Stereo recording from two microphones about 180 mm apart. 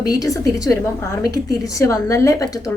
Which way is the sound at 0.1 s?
20° left (ahead or behind).